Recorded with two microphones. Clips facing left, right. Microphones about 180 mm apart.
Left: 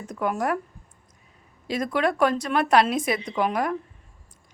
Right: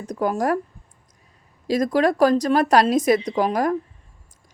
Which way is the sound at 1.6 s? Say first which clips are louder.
Right 5 dB; 40° right (ahead or behind).